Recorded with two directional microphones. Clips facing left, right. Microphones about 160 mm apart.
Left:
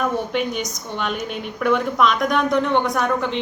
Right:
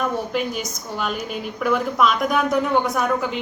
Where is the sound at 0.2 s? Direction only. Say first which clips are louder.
Left 1 dB; centre (ahead or behind).